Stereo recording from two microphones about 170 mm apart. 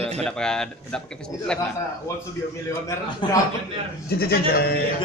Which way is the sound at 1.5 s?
20° left (ahead or behind).